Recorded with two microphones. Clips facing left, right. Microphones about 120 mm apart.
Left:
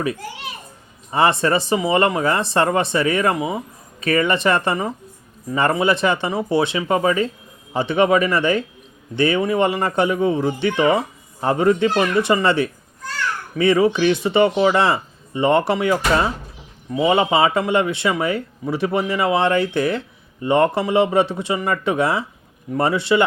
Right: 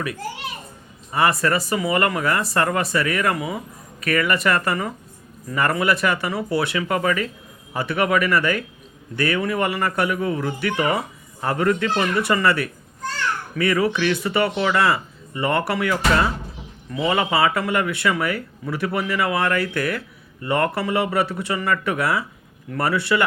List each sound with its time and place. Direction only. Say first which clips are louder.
1.1 s speech: left 3 dB; 25° left (ahead or behind)